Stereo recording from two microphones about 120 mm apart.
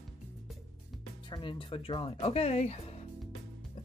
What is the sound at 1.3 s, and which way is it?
Speech, 45° left (ahead or behind).